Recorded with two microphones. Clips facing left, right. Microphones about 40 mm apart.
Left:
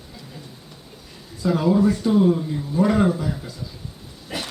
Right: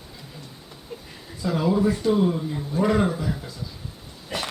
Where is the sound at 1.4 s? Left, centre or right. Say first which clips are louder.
Left 3 dB; centre.